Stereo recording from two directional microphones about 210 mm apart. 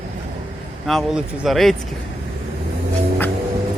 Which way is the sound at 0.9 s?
Centre (ahead or behind).